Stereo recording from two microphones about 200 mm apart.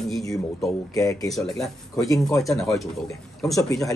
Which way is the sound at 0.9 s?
15° left (ahead or behind).